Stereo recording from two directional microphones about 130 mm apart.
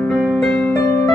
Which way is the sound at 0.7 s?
25° left (ahead or behind).